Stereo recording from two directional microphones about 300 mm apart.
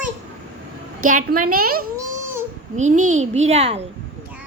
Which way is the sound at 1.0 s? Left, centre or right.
Right.